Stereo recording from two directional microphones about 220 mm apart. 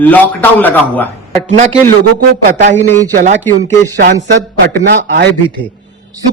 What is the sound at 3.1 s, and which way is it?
Speech, 35° right (ahead or behind).